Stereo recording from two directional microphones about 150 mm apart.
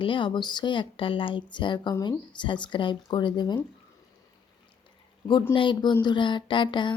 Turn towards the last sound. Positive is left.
turn(degrees=35)  # may be behind; listen again after turning